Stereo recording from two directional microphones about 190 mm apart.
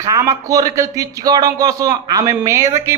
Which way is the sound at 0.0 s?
20° right (ahead or behind).